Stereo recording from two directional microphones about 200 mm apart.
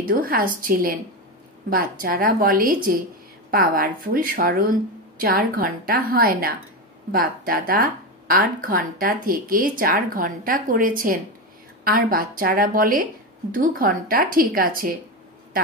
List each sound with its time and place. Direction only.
0.0 s speech: 45° right (ahead or behind)